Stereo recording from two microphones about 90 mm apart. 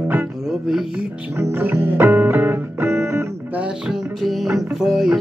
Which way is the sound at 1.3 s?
25° right (ahead or behind).